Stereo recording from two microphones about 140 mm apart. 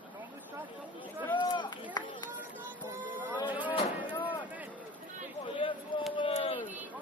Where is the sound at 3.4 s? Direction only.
10° right (ahead or behind).